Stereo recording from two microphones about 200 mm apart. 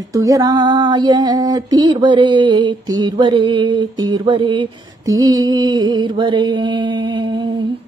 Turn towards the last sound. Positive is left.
turn(degrees=-20)  # may be behind; listen again after turning